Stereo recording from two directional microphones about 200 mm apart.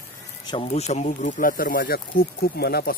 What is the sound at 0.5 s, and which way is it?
Speech, 35° left (ahead or behind).